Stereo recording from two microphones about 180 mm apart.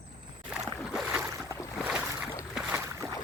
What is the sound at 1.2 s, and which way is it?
Boat, 15° right (ahead or behind).